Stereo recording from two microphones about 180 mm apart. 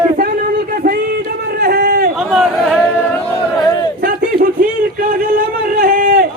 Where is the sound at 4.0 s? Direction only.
55° right (ahead or behind).